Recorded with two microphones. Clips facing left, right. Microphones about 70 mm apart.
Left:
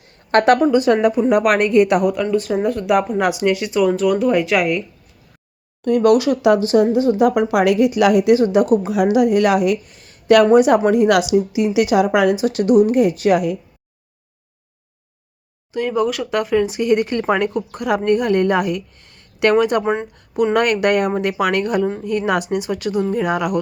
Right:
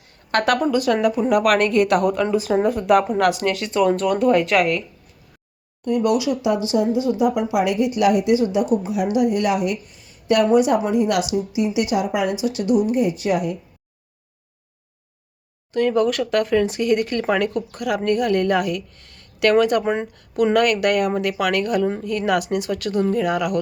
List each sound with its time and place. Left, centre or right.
0.3 s a woman's voice: left
2.3 s speech: centre
3.2 s speech: centre
3.8 s speech: centre
5.8 s speech: left
7.3 s a woman's voice: left
9.1 s speech: left
12.4 s a woman's voice: left
15.7 s speech: centre; by 19.8 s left
19.8 s speech: centre
20.5 s a woman's voice: left